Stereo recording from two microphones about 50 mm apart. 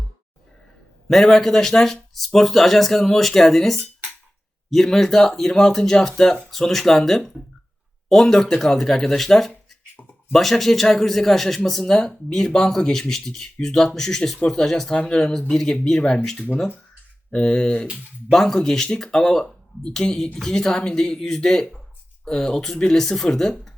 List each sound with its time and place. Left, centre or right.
1.0 s speech: centre
17.3 s speech: centre
18.3 s speech: centre